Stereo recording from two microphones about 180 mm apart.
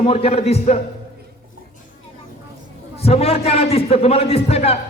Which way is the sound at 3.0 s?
35° left (ahead or behind).